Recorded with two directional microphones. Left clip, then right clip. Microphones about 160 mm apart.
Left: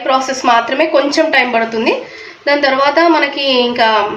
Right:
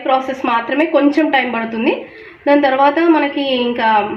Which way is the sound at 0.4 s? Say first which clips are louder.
Left 4 dB; 20° right (ahead or behind).